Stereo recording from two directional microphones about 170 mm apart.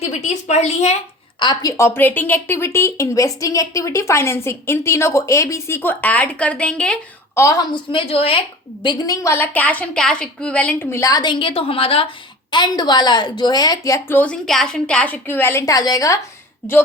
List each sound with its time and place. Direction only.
0.0 s a woman's voice: 40° left (ahead or behind)
1.4 s a woman's voice: 25° left (ahead or behind); by 7.4 s 5° left (ahead or behind)
7.4 s a woman's voice: 25° left (ahead or behind)